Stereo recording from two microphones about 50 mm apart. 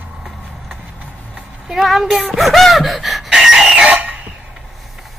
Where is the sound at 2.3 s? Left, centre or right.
Centre.